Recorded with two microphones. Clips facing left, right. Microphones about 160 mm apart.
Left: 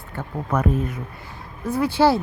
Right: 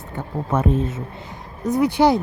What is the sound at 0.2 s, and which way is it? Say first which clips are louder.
Speech: right 1 dB; 25° right (ahead or behind).